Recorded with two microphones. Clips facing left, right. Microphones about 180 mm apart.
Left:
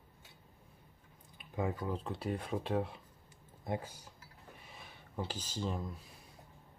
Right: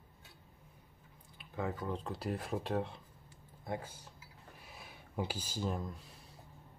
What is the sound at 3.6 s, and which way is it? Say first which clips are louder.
Speech: left 2 dB; 20° left (ahead or behind).